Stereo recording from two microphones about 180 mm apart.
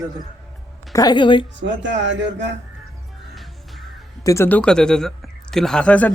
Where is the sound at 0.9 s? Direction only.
25° left (ahead or behind).